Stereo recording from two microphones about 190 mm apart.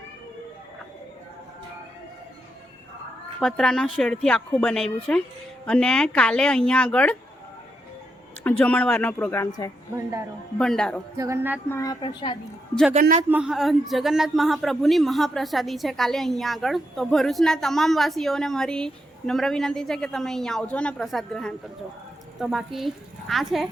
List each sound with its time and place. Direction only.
3.4 s a man's voice: 5° left (ahead or behind)
8.4 s speech: 5° left (ahead or behind)
9.9 s a sound: 15° right (ahead or behind)
10.6 s a man's voice: 5° left (ahead or behind)
11.2 s a sound: 15° right (ahead or behind)
11.7 s a woman's voice: 20° left (ahead or behind)
13.3 s a man's voice: 5° right (ahead or behind)